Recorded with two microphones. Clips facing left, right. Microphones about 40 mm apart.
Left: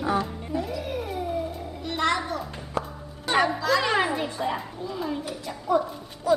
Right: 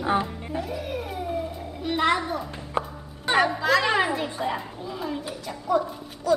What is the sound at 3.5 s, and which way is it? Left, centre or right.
Speech, centre.